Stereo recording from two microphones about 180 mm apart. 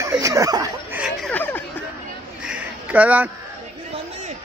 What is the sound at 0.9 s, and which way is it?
Speech, 5° right (ahead or behind).